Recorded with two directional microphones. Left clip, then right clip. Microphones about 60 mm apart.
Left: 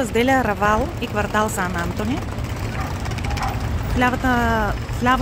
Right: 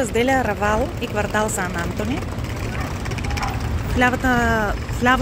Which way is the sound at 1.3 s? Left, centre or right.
Left.